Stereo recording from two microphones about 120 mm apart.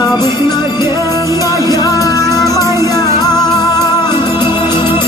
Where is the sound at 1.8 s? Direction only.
30° left (ahead or behind).